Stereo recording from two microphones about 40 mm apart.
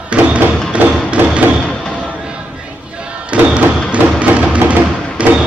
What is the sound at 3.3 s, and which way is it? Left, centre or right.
Thump, right.